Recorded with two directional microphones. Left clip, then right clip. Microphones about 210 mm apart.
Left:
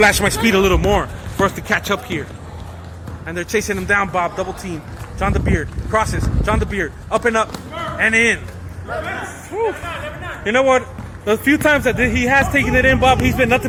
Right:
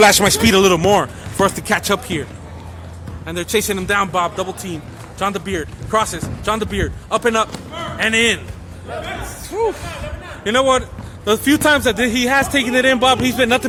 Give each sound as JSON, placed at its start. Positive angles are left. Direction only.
{"t": 0.0, "sound": "speech", "side_deg": -30}
{"t": 3.2, "sound": "speech", "side_deg": -15}
{"t": 10.4, "sound": "speech", "side_deg": -15}
{"t": 12.4, "sound": "speech", "side_deg": -10}